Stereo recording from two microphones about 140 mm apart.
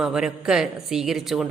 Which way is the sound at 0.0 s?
5° right (ahead or behind).